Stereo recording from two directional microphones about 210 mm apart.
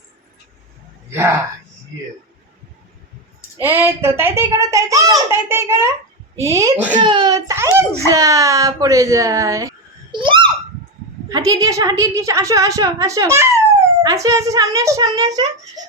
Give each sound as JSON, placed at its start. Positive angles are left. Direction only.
{"t": 3.6, "sound": "a woman's voice", "side_deg": -10}
{"t": 6.9, "sound": "a child's voice", "side_deg": -20}